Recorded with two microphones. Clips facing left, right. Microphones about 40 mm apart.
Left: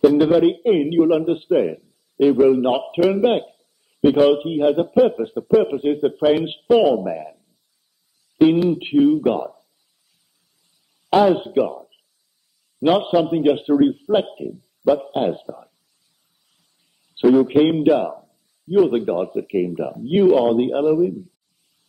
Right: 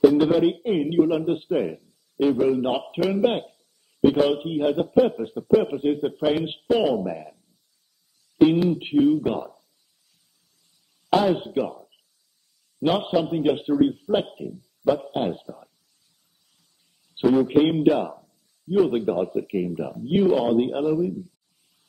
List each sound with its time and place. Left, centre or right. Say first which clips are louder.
0.1 s a man's voice: left 4 dB; centre
8.9 s speech: left 4 dB; centre
11.1 s a man's voice: left 5 dB; centre
12.8 s a man's voice: left 5 dB; centre
17.1 s a man's voice: left 4 dB; centre